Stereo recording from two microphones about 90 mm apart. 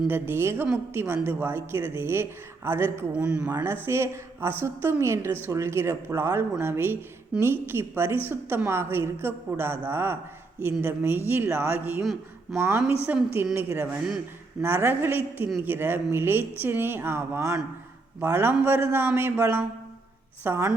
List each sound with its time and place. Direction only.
0.1 s a woman's voice: 25° right (ahead or behind)
3.2 s speech: 10° right (ahead or behind)
3.4 s a woman's voice: 25° right (ahead or behind)